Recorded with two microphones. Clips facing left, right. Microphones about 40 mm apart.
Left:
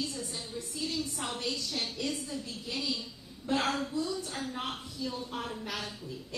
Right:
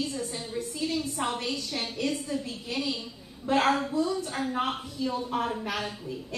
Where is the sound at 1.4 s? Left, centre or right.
Right.